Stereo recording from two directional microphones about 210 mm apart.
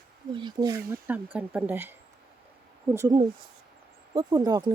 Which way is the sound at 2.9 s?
10° right (ahead or behind).